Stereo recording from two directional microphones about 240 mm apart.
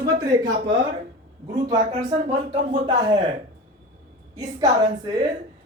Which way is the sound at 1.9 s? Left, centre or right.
Centre.